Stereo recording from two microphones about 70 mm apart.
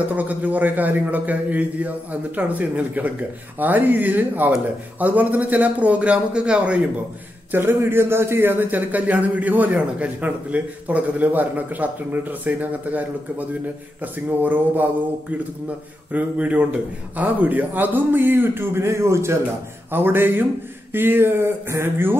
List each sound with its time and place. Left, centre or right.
0.1 s a man's voice: right
7.5 s a man's voice: right
19.9 s speech: right